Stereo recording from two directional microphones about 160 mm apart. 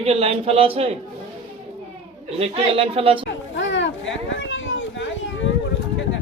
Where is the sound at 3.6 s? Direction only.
90° left.